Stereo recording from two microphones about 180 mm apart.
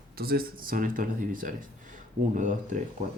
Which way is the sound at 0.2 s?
55° right (ahead or behind).